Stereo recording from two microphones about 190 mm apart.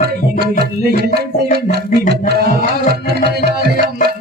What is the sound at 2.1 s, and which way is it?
Music, 55° right (ahead or behind).